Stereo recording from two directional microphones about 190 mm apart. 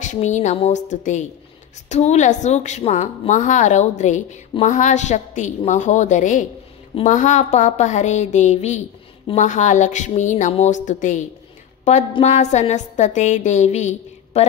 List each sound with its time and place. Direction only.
0.0 s a woman's voice: 40° left (ahead or behind)